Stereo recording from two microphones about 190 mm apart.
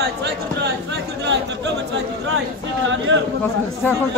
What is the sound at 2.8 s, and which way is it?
Speech, 75° right (ahead or behind).